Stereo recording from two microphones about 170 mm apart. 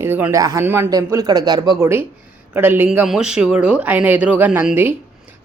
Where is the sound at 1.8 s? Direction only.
15° right (ahead or behind).